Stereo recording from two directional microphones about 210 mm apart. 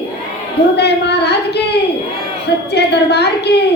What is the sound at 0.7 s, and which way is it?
Speech, 50° left (ahead or behind).